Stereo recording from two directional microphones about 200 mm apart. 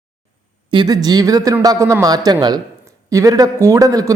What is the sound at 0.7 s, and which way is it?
Speech, 20° right (ahead or behind).